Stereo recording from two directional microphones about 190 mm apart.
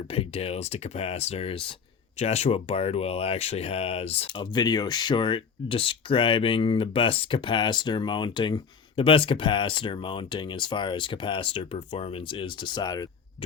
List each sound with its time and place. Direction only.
0.1 s speech: 30° left (ahead or behind)